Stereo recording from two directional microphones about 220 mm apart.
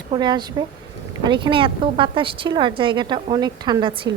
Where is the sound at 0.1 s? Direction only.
20° right (ahead or behind).